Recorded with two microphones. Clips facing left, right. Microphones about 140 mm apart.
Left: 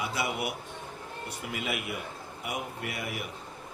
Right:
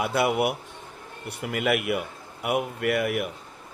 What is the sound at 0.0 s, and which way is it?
A man's voice, 60° right (ahead or behind).